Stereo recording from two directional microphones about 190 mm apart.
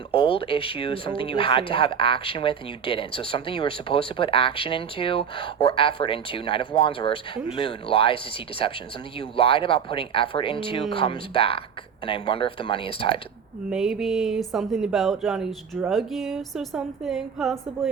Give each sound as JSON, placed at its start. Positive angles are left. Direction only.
{"t": 0.1, "sound": "speech", "side_deg": 30}
{"t": 13.7, "sound": "speech", "side_deg": -5}